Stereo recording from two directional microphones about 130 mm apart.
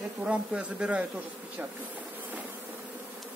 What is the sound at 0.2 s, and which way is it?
Speech, 10° right (ahead or behind).